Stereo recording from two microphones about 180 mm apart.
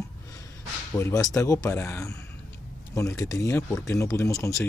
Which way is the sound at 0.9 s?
15° left (ahead or behind).